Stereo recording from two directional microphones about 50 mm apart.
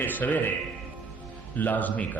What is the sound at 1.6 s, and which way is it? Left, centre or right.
Speech, left.